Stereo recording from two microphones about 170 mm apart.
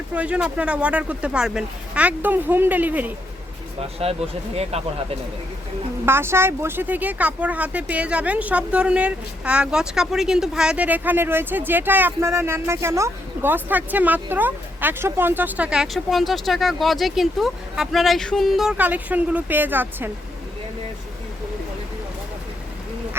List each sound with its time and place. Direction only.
0.1 s speech: 5° right (ahead or behind)
4.0 s speech: 35° right (ahead or behind)
6.1 s speech: 15° right (ahead or behind)